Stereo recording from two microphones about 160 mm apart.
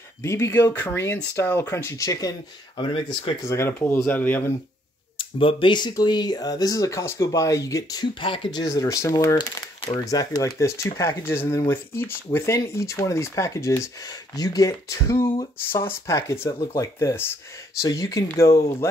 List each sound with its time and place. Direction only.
0.2 s speech: 15° left (ahead or behind)
5.1 s speech: 35° left (ahead or behind); by 18.9 s 15° left (ahead or behind)